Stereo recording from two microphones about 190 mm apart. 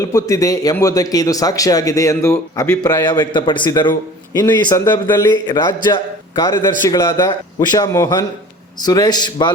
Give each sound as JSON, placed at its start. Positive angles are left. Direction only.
{"t": 0.0, "sound": "a man's voice", "side_deg": 15}